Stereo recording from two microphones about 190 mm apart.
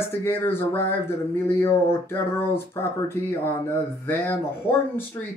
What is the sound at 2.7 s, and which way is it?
Speech, 15° left (ahead or behind).